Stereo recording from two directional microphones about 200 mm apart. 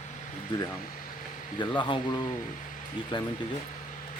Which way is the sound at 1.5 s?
25° left (ahead or behind).